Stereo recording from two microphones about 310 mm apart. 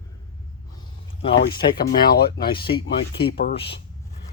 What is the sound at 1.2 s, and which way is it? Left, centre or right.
Speech, centre.